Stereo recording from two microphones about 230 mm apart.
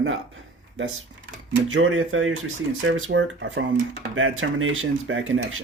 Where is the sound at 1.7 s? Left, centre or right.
Right.